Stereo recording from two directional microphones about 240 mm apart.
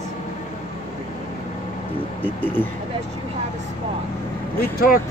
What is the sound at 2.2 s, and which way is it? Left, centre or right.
Speech, centre.